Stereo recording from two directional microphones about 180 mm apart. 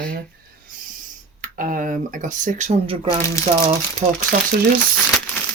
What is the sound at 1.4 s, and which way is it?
Speech, 50° right (ahead or behind).